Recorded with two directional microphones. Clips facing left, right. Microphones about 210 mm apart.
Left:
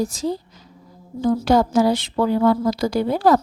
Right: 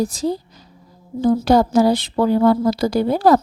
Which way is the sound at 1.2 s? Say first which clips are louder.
Right 2 dB; 35° right (ahead or behind).